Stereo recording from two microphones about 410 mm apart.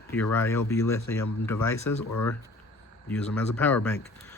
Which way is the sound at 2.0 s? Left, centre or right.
Left.